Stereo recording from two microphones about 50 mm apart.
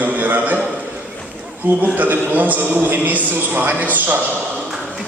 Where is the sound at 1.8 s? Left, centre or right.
Right.